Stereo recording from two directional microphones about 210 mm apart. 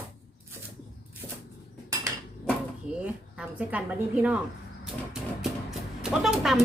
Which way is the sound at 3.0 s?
5° right (ahead or behind).